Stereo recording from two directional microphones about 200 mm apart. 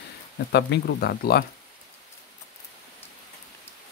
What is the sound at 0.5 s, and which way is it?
Speech, 55° left (ahead or behind).